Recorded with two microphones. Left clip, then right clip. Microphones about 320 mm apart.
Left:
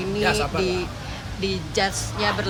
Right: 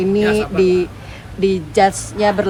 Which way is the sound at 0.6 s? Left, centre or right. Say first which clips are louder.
Right 10 dB; centre.